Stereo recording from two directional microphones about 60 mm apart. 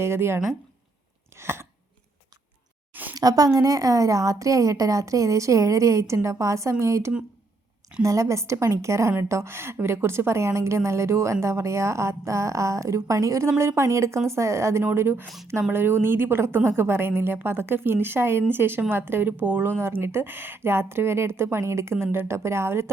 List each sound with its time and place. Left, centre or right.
0.0 s a woman's voice: right
1.4 s chewing: right
2.9 s a sound: right
3.2 s a woman's voice: right